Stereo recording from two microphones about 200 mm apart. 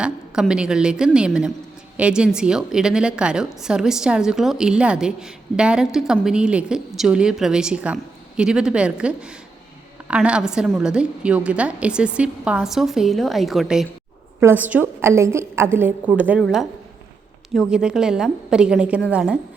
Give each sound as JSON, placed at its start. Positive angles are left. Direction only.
{"t": 0.0, "sound": "a woman's voice", "side_deg": -5}